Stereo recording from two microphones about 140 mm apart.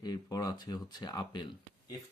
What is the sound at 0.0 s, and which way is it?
Speech, 30° left (ahead or behind).